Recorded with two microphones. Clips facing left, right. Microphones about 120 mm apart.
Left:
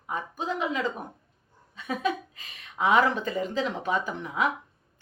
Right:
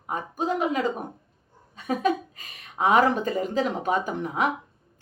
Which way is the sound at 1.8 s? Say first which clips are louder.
Right 4 dB; 45° right (ahead or behind).